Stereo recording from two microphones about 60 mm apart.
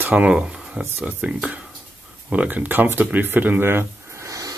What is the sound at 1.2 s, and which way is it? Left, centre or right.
Speech, right.